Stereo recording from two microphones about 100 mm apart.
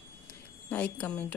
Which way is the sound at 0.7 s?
15° left (ahead or behind).